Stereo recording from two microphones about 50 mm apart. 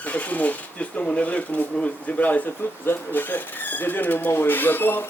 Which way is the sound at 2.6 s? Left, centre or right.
Left.